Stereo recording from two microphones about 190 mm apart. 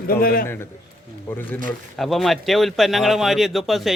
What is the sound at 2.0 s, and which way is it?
Speech, centre (ahead or behind).